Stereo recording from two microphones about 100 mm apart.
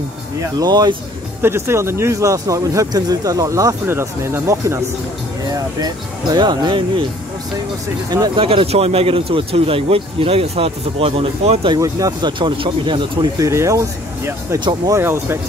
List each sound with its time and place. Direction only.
0.7 s speech: 45° right (ahead or behind)
1.4 s speech: 25° right (ahead or behind)
5.4 s speech: 40° right (ahead or behind)
8.4 s speech: 70° right (ahead or behind); by 11.6 s 85° right
11.8 s speech: 35° right (ahead or behind)
12.3 s speech: 55° right (ahead or behind)
13.4 s speech: 30° right (ahead or behind)